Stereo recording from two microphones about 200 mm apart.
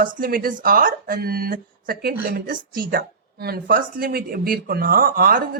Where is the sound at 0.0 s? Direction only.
45° right (ahead or behind).